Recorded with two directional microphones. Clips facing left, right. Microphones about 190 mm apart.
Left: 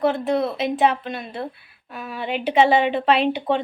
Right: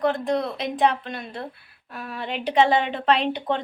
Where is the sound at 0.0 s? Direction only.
5° left (ahead or behind).